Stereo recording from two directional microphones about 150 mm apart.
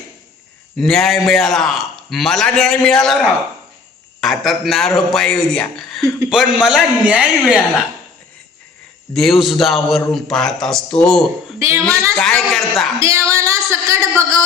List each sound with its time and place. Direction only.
0.8 s a man's voice: centre (ahead or behind)
9.1 s a man's voice: centre (ahead or behind)
11.6 s a woman's voice: 20° right (ahead or behind)
12.1 s a man's voice: 5° left (ahead or behind)
13.0 s a sound: 20° right (ahead or behind)